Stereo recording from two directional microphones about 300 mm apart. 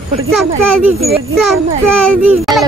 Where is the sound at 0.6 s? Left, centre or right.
Right.